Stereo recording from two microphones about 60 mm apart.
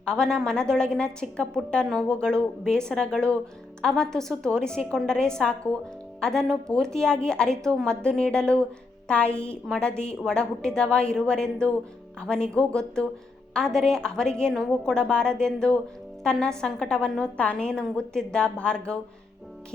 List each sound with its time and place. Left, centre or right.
0.0 s a woman's voice: centre